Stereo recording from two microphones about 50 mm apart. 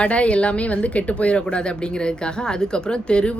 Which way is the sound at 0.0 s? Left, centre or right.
Left.